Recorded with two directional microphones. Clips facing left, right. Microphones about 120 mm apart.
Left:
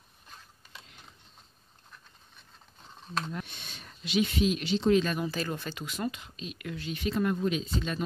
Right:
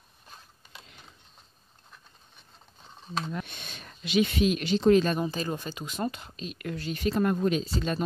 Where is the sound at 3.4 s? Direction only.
55° right (ahead or behind).